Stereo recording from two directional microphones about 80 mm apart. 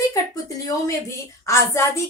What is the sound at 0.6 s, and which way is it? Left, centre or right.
A woman's voice, left.